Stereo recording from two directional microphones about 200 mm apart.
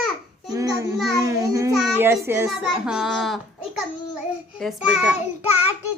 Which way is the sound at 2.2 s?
10° right (ahead or behind).